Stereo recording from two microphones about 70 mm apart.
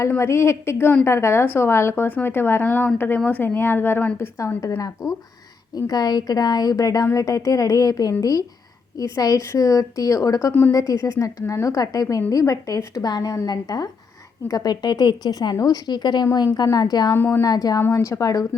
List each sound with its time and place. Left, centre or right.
0.2 s speech: left
4.4 s speech: left
5.7 s a woman's voice: left
16.2 s speech: left
17.2 s speech: left
17.4 s a woman's voice: left
17.9 s a woman's voice: left